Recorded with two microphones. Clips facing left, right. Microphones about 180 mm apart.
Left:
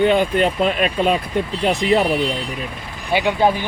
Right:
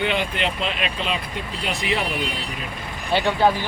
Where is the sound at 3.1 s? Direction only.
15° left (ahead or behind).